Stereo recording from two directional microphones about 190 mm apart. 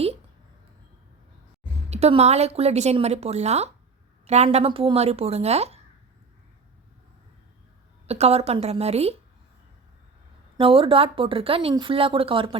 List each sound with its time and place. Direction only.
1.9 s a woman's voice: 35° right (ahead or behind)
8.0 s a woman's voice: 35° right (ahead or behind)
10.6 s a woman's voice: 30° right (ahead or behind)